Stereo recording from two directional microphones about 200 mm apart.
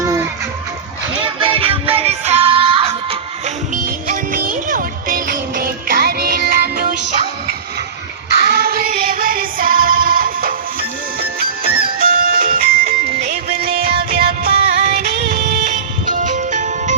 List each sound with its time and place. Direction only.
1.4 s music: 30° right (ahead or behind)
3.8 s music: 45° right (ahead or behind)
8.4 s child singing: 50° right (ahead or behind)
14.1 s music: 50° right (ahead or behind)